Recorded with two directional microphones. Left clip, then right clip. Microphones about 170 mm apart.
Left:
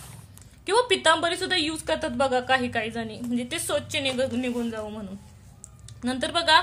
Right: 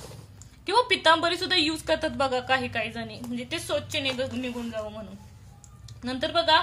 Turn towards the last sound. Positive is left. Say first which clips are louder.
# left 1 dB
turn(degrees=35)  # may be behind; listen again after turning